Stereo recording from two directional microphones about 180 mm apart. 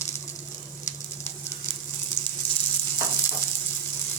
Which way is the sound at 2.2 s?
15° left (ahead or behind).